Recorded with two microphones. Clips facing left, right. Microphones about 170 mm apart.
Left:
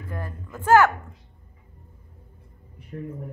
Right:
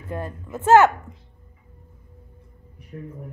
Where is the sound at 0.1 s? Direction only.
20° right (ahead or behind).